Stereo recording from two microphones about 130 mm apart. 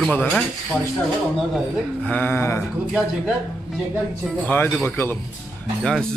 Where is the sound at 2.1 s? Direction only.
15° left (ahead or behind).